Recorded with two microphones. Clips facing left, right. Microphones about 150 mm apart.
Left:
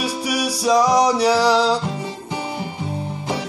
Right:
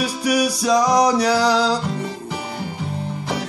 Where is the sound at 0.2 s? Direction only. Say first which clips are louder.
Right 5 dB; 5° left (ahead or behind).